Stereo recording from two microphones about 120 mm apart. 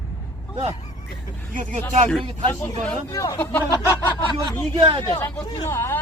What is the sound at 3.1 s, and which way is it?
Speech, 30° left (ahead or behind).